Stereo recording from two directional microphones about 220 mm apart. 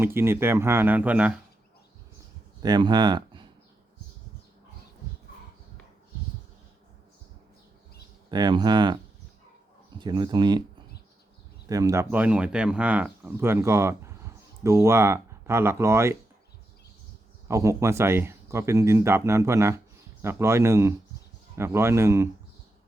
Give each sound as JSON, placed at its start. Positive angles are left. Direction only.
{"t": 0.0, "sound": "speech", "side_deg": -10}
{"t": 2.6, "sound": "speech", "side_deg": -20}
{"t": 8.3, "sound": "speech", "side_deg": -20}
{"t": 10.0, "sound": "speech", "side_deg": -20}
{"t": 11.7, "sound": "speech", "side_deg": -15}
{"t": 17.5, "sound": "speech", "side_deg": -15}